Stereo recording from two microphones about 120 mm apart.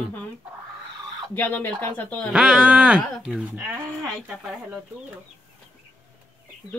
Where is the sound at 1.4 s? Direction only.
15° left (ahead or behind).